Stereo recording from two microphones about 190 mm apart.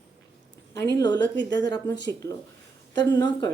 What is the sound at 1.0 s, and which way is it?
Speech, 25° left (ahead or behind).